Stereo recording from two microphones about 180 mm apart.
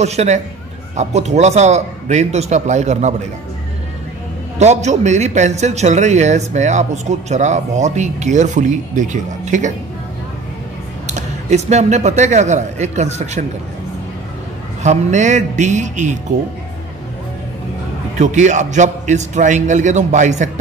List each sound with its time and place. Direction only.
0.0 s speech: 40° right (ahead or behind)
4.6 s speech: 40° right (ahead or behind)
11.1 s speech: 40° right (ahead or behind)
14.8 s a man's voice: 40° right (ahead or behind)
18.1 s a man's voice: 40° right (ahead or behind)